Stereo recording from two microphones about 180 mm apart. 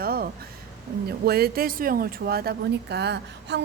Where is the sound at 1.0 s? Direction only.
60° right (ahead or behind).